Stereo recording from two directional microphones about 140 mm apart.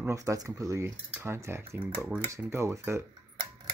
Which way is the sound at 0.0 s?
20° right (ahead or behind).